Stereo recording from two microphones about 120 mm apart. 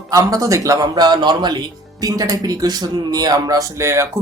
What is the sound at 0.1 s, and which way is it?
Speech, 30° right (ahead or behind).